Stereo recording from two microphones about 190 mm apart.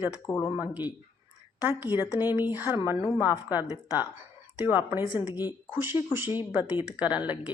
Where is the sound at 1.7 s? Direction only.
10° right (ahead or behind).